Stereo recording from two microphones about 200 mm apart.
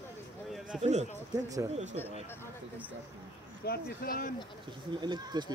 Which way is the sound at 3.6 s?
50° left (ahead or behind).